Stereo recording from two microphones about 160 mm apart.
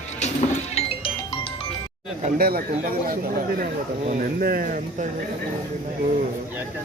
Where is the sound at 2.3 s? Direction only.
70° right (ahead or behind).